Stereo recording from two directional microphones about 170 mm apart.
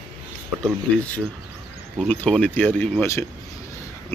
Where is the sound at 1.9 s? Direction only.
10° left (ahead or behind).